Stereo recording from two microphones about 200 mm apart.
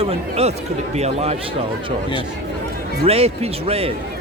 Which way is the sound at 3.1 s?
30° right (ahead or behind).